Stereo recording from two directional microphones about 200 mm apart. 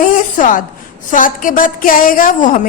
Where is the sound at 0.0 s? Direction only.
40° left (ahead or behind).